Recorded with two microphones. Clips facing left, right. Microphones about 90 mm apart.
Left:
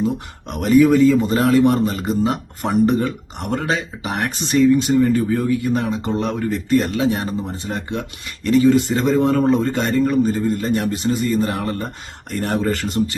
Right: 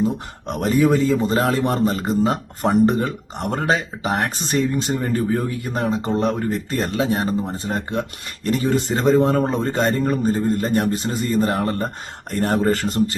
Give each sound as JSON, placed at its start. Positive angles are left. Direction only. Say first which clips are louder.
{"t": 0.4, "sound": "a man's voice", "louder": "left 4 dB", "side_deg": -35}